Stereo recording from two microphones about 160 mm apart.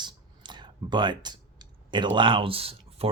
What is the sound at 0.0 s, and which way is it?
Speech, 30° right (ahead or behind).